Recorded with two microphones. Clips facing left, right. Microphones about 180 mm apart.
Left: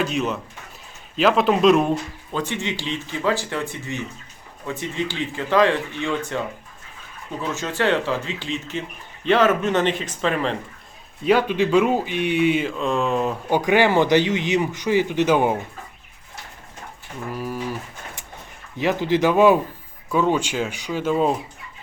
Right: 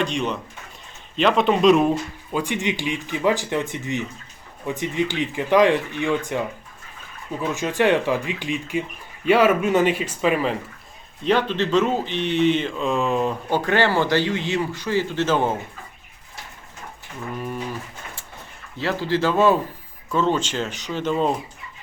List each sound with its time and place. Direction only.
0.0 s speech: 5° left (ahead or behind)
2.4 s speech: 15° right (ahead or behind)
11.2 s speech: 10° left (ahead or behind)
13.5 s speech: 15° left (ahead or behind)
17.3 s a sound: 5° left (ahead or behind)
18.8 s speech: 20° left (ahead or behind)